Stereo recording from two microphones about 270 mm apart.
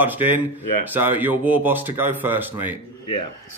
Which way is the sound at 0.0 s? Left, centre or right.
Centre.